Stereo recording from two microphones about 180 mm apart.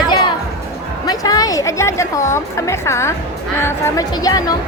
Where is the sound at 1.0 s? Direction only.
20° left (ahead or behind).